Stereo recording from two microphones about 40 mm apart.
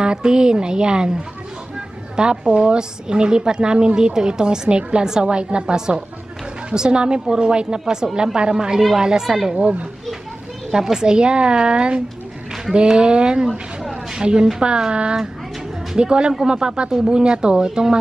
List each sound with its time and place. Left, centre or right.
0.0 s a woman's voice: right
10.7 s a woman's voice: centre
17.2 s a woman's voice: right
17.6 s speech: centre